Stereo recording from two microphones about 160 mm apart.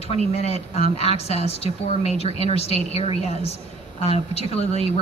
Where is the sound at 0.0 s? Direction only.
40° left (ahead or behind).